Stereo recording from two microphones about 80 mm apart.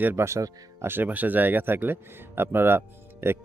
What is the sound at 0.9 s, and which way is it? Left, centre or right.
Speech, right.